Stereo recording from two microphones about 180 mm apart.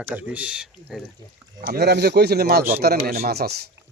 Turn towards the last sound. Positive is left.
turn(degrees=-60)  # may be behind; listen again after turning